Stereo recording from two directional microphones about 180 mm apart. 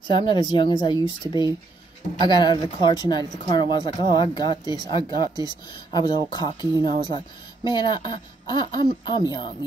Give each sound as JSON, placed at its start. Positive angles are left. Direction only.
{"t": 0.1, "sound": "speech", "side_deg": 25}